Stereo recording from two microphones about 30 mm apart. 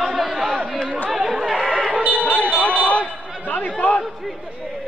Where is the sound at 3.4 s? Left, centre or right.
Left.